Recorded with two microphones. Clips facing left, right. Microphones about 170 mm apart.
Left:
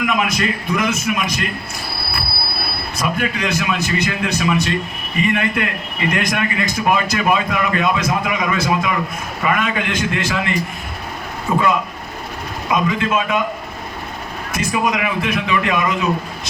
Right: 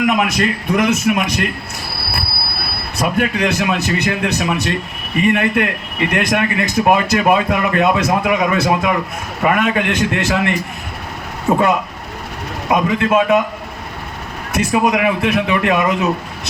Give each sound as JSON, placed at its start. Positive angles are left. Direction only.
{"t": 0.2, "sound": "speech", "side_deg": -65}
{"t": 3.0, "sound": "speech", "side_deg": -60}
{"t": 11.5, "sound": "speech", "side_deg": -40}
{"t": 12.6, "sound": "speech", "side_deg": -60}
{"t": 14.5, "sound": "speech", "side_deg": -70}